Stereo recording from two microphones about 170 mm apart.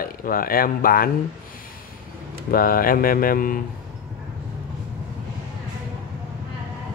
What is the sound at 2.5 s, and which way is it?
A man's voice, 60° left (ahead or behind).